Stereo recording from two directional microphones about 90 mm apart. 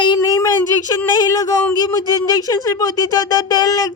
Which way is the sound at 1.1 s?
45° left (ahead or behind).